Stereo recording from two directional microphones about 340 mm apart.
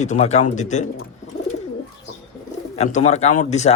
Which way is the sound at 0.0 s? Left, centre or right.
Centre.